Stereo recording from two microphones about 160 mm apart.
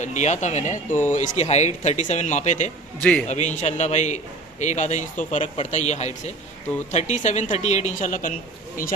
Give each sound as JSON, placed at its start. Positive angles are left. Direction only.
{"t": 0.0, "sound": "a man's voice", "side_deg": 45}
{"t": 3.0, "sound": "a man's voice", "side_deg": 5}
{"t": 3.3, "sound": "a man's voice", "side_deg": 45}